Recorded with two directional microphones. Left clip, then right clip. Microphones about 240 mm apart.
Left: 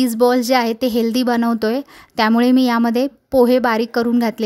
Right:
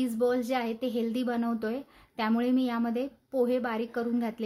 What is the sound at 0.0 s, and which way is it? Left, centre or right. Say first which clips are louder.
Speech: left 13 dB; left.